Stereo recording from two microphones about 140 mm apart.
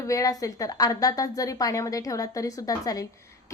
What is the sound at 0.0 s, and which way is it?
A woman's voice, 25° left (ahead or behind).